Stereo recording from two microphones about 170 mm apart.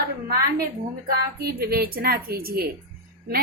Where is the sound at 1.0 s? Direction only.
65° right (ahead or behind).